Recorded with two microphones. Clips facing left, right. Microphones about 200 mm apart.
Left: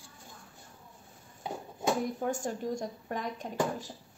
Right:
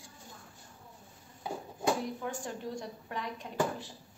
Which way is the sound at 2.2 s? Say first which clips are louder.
Left 5 dB; 45° left (ahead or behind).